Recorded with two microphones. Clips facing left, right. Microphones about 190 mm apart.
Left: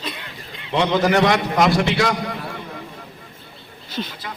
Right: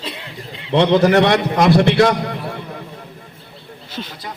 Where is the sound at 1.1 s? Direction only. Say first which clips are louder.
Right 3 dB; 60° right (ahead or behind).